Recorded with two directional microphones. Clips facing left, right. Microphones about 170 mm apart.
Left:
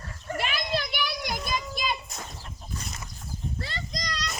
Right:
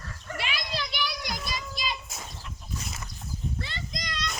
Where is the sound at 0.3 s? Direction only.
50° left (ahead or behind).